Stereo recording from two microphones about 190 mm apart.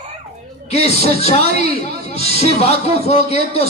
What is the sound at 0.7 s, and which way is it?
A man's voice, 35° left (ahead or behind).